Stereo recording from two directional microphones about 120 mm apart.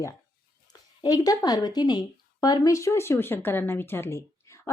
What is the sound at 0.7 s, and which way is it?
A woman's voice, 35° left (ahead or behind).